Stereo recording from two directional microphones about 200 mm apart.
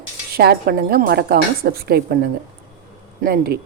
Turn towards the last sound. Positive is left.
turn(degrees=-50)  # may be behind; listen again after turning